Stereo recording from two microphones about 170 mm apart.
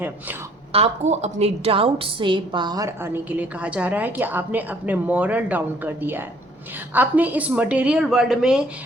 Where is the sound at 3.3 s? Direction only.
10° right (ahead or behind).